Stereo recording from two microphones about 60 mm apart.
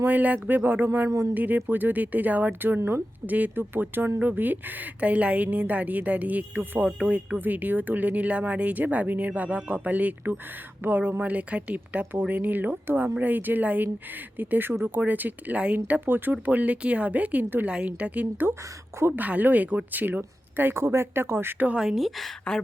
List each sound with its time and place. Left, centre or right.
0.0 s a woman's voice: right
3.2 s a woman's voice: right
20.7 s speech: right
21.8 s a woman's voice: centre